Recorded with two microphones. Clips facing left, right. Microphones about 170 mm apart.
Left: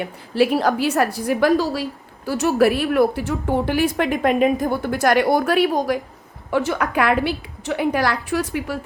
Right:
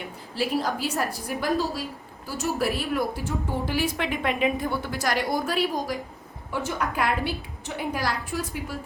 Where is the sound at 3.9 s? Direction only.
45° left (ahead or behind); by 6.0 s 65° left (ahead or behind).